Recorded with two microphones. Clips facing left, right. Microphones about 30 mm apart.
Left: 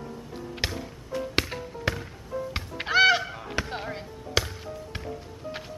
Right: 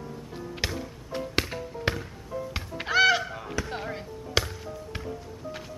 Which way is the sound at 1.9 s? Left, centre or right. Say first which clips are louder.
Even; right.